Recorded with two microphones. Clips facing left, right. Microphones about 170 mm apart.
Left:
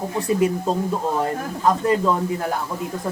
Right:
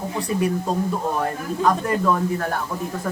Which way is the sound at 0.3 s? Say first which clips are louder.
Left 3 dB; 20° left (ahead or behind).